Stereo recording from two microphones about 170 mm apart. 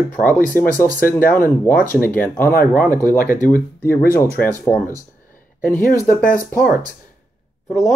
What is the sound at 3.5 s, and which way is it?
Speech, 15° left (ahead or behind).